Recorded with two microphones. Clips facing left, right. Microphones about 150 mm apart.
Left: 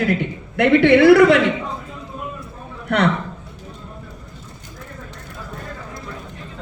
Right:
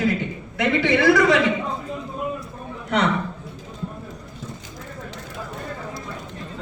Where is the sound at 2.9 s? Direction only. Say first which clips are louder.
Left 3 dB; 60° left (ahead or behind).